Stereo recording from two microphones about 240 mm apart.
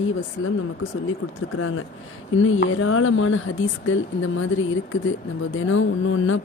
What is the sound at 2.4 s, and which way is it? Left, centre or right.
Speech, left.